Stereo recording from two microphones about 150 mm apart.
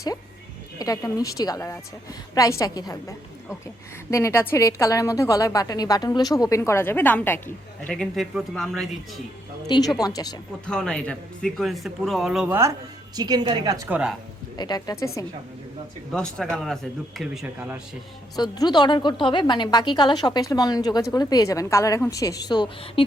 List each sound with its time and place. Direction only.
0.8 s a woman's voice: 25° left (ahead or behind); by 9.2 s centre (ahead or behind)
9.6 s a woman's voice: 30° left (ahead or behind)
10.7 s speech: 5° left (ahead or behind)
12.5 s a woman's voice: 15° right (ahead or behind)
13.8 s speech: 10° right (ahead or behind)
14.5 s a woman's voice: 25° left (ahead or behind)
16.1 s speech: 5° left (ahead or behind)
17.4 s speech: 10° right (ahead or behind)
18.3 s a woman's voice: 25° left (ahead or behind)